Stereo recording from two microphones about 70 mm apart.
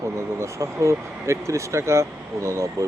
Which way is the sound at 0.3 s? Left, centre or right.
Right.